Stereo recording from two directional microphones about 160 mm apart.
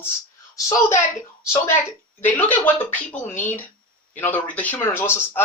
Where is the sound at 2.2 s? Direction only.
10° left (ahead or behind).